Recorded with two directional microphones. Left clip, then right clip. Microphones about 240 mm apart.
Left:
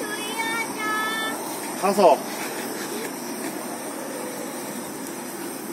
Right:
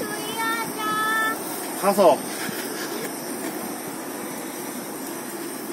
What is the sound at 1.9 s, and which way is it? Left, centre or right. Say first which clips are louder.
Speech: even; centre.